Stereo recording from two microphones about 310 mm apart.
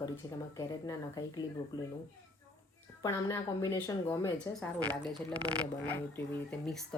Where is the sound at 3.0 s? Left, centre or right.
Centre.